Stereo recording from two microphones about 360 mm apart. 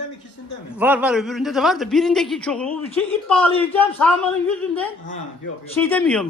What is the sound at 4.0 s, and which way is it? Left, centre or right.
Speech, centre.